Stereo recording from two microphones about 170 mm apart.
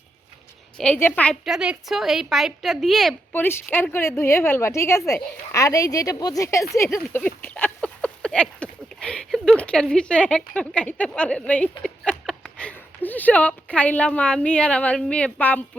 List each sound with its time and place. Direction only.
0.8 s a woman's voice: 10° left (ahead or behind)
1.5 s a woman's voice: 5° right (ahead or behind)
3.3 s a woman's voice: 10° left (ahead or behind)